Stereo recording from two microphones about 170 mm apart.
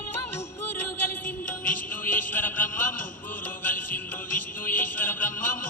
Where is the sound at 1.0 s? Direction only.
10° left (ahead or behind).